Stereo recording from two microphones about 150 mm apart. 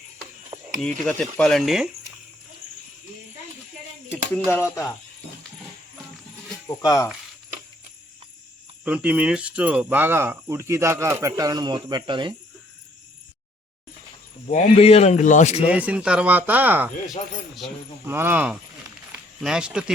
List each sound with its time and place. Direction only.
0.8 s speech: 5° left (ahead or behind)
4.4 s speech: 15° left (ahead or behind)
6.7 s speech: 20° left (ahead or behind)
8.8 s speech: 5° right (ahead or behind); by 12.3 s 30° right (ahead or behind)
14.5 s speech: 40° left (ahead or behind)
15.6 s speech: 10° right (ahead or behind)
18.0 s speech: 15° right (ahead or behind)
19.1 s a sound: 5° right (ahead or behind)